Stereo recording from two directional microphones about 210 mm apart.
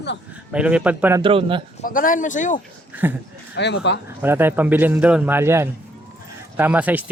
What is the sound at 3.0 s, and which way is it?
Speech, 10° right (ahead or behind).